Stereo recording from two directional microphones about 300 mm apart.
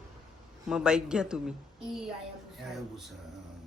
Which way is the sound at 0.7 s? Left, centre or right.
Centre.